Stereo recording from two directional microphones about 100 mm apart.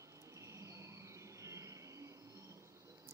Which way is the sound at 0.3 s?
30° right (ahead or behind).